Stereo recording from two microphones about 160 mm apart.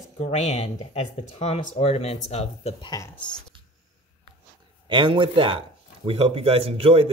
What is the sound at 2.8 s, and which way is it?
Speech, 25° left (ahead or behind).